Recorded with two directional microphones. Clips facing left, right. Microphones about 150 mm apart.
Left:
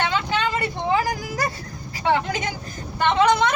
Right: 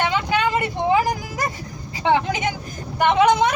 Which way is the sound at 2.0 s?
20° right (ahead or behind).